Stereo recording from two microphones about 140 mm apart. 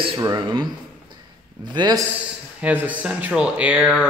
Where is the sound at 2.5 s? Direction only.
10° right (ahead or behind).